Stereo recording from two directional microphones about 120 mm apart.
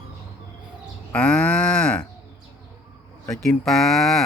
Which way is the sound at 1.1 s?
10° left (ahead or behind).